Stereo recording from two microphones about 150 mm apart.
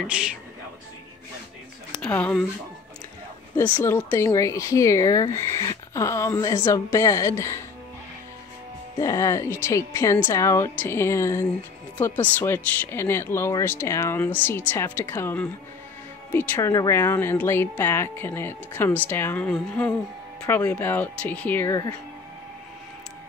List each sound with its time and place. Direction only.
0.0 s a man's voice: 5° right (ahead or behind)
1.9 s speech: 10° left (ahead or behind)
3.5 s speech: 15° left (ahead or behind)
8.9 s speech: 20° left (ahead or behind)